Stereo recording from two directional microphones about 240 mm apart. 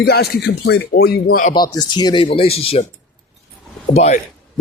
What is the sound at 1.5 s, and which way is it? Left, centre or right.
Speech, centre.